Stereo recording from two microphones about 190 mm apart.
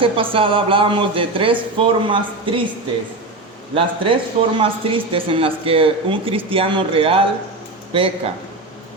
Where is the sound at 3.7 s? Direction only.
30° right (ahead or behind).